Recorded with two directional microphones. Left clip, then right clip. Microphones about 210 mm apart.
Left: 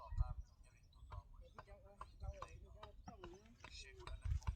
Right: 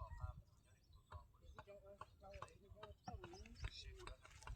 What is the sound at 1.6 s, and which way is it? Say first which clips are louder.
Clip-clop: even; 25° left (ahead or behind).